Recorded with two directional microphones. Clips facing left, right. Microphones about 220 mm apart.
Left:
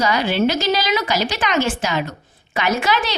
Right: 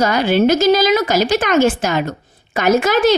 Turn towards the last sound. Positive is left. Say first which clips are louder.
# right 8 dB
turn(degrees=-45)  # may be behind; listen again after turning